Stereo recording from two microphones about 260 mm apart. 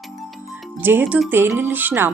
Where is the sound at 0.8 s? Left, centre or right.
Centre.